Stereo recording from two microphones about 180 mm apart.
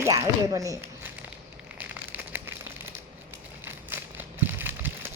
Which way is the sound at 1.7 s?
10° right (ahead or behind).